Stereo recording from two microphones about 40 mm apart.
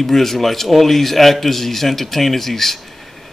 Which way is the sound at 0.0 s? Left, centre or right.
Centre.